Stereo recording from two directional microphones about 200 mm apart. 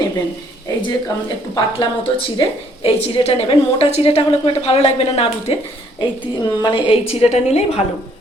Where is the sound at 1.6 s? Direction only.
25° left (ahead or behind).